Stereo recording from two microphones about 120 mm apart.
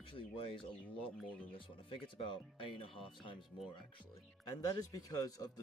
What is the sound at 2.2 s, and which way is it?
Speech, 45° left (ahead or behind).